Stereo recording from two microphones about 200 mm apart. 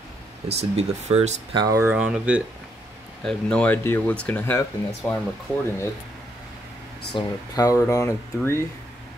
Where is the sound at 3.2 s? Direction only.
5° left (ahead or behind).